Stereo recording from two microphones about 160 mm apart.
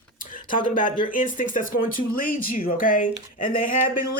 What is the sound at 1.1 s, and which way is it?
Speech, 55° left (ahead or behind).